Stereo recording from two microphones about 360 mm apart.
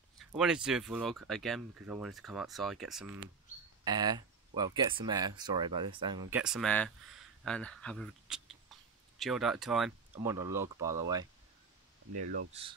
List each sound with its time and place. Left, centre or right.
0.2 s speech: centre
12.2 s speech: right